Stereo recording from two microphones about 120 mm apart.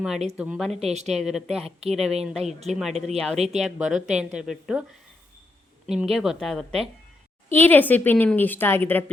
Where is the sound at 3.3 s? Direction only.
65° right (ahead or behind).